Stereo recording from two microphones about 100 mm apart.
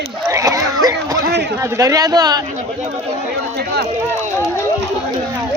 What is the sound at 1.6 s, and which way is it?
Speech, 30° right (ahead or behind).